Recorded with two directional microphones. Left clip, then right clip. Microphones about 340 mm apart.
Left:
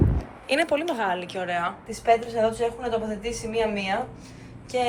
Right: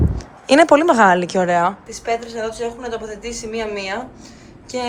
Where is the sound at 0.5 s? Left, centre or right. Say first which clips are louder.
Right 12 dB; right.